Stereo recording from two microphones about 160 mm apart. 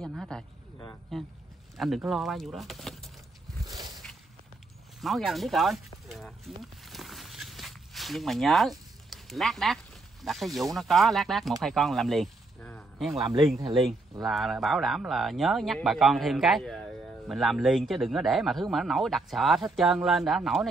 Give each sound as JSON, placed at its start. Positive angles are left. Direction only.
{"t": 0.0, "sound": "a man's voice", "side_deg": 0}
{"t": 3.6, "sound": "a sound", "side_deg": -25}
{"t": 5.0, "sound": "a man's voice", "side_deg": 0}
{"t": 6.6, "sound": "walk", "side_deg": 0}
{"t": 10.2, "sound": "a man's voice", "side_deg": 0}
{"t": 14.2, "sound": "a man's voice", "side_deg": 0}